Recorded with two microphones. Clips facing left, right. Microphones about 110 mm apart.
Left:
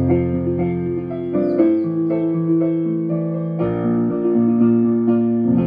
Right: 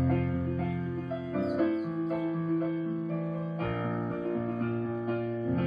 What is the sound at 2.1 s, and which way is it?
Music, 70° left (ahead or behind).